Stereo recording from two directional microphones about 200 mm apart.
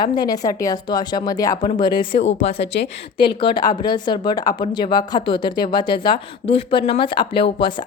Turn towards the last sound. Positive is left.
turn(degrees=25)  # may be behind; listen again after turning